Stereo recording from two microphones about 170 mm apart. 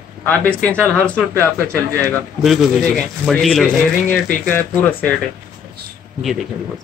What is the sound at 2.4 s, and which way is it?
A man's voice, centre (ahead or behind).